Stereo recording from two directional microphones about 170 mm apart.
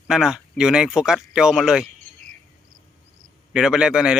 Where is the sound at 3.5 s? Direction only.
5° right (ahead or behind).